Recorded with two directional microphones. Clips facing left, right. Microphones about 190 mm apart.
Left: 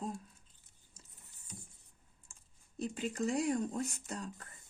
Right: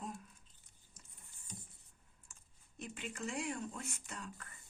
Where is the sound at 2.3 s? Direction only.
35° left (ahead or behind).